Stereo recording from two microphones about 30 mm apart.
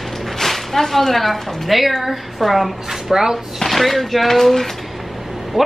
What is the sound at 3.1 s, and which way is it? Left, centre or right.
Speech, centre.